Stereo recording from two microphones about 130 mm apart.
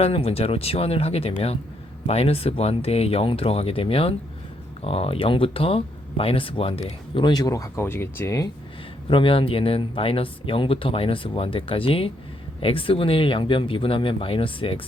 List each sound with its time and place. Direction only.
0.0 s speech: 50° left (ahead or behind); by 8.4 s 20° left (ahead or behind)
9.0 s speech: 40° left (ahead or behind)